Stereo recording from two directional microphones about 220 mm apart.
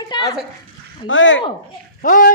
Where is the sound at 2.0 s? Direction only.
40° left (ahead or behind).